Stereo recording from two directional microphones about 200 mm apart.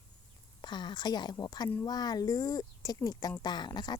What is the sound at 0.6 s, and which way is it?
Speech, 20° left (ahead or behind).